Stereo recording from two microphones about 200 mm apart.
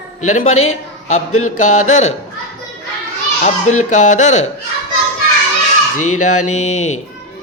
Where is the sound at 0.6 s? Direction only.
35° left (ahead or behind).